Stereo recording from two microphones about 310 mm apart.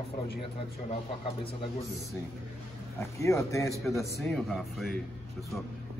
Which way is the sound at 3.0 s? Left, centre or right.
Centre.